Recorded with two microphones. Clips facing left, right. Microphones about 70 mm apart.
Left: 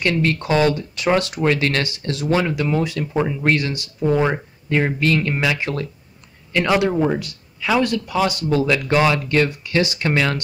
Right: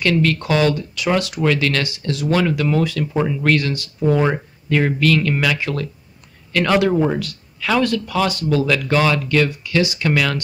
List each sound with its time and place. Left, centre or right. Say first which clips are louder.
0.0 s speech: right 2 dB; left
3.1 s speech: left 1 dB; centre; by 5.9 s left
6.5 s speech: right 1 dB; centre
6.9 s speech: right 1 dB; centre
7.2 s speech: right 3 dB; centre